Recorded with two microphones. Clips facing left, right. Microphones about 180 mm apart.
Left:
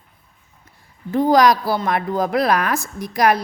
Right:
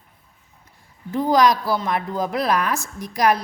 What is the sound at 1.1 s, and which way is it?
A woman's voice, 65° left (ahead or behind).